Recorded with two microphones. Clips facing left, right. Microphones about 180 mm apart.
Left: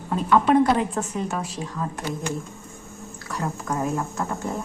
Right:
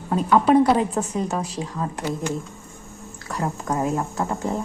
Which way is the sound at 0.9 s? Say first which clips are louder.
Right 3 dB; 35° right (ahead or behind).